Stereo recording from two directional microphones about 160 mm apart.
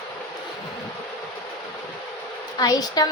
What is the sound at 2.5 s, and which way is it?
Speech, 25° left (ahead or behind).